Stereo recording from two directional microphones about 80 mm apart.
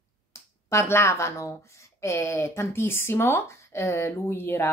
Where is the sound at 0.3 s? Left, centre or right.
Left.